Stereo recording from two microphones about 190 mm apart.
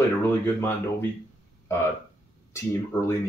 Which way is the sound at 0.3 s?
15° left (ahead or behind).